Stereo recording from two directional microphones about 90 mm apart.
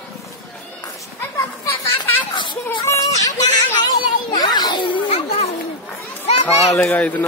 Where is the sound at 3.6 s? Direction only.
45° left (ahead or behind); by 5.3 s 80° left.